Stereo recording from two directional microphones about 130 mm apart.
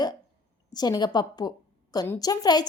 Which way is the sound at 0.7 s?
30° left (ahead or behind).